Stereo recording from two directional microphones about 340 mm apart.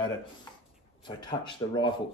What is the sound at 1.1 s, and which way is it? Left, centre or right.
Speech, centre.